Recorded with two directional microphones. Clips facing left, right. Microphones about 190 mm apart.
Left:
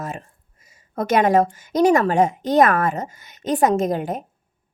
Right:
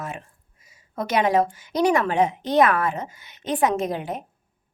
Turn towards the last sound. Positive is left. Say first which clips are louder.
# left 5 dB
turn(degrees=45)  # may be behind; listen again after turning